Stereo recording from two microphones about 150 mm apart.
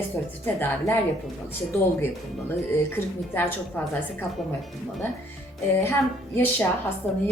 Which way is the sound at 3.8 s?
15° left (ahead or behind).